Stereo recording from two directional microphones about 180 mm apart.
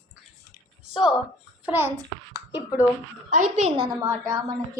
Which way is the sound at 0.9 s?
5° right (ahead or behind).